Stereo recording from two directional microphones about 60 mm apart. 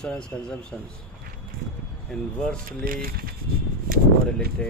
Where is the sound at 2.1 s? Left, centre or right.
Centre.